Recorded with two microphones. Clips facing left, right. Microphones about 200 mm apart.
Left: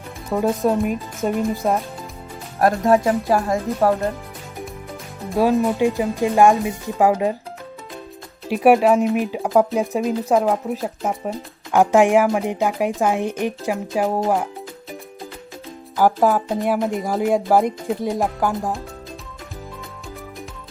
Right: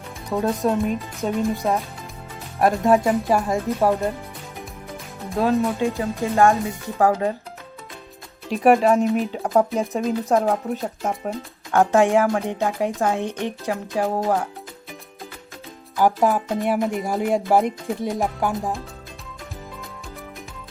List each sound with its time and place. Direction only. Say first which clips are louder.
0.3 s speech: left 2 dB; centre (ahead or behind)
5.3 s speech: left 3 dB; centre (ahead or behind)
6.0 s a woman's voice: left 1 dB; 15° left (ahead or behind)
8.4 s speech: left 2 dB; 5° left (ahead or behind)
11.7 s a woman's voice: left 2 dB; 15° left (ahead or behind)
16.0 s speech: left 2 dB; centre (ahead or behind)